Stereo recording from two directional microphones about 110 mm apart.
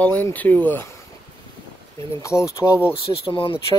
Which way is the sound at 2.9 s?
55° left (ahead or behind).